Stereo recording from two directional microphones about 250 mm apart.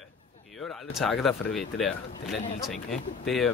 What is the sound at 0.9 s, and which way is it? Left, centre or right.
Speech, centre.